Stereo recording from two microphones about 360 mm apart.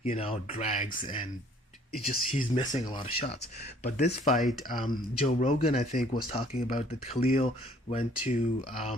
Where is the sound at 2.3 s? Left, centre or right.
Centre.